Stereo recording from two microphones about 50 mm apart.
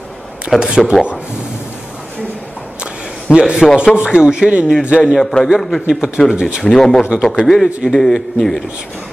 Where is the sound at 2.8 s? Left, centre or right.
Centre.